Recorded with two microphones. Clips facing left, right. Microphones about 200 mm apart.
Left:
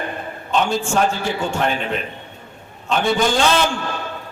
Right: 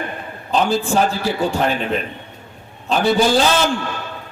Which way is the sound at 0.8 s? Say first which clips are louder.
Right 1 dB; 35° right (ahead or behind).